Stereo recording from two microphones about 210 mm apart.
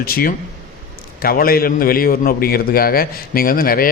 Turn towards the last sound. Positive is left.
turn(degrees=45)  # may be behind; listen again after turning